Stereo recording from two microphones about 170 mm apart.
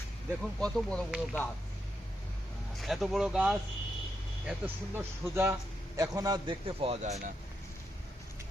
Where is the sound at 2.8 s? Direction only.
Centre (ahead or behind).